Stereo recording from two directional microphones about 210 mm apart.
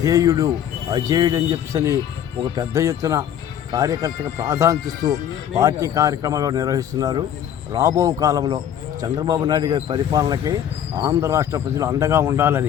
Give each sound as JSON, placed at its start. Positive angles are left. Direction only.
{"t": 0.0, "sound": "a man's voice", "side_deg": -15}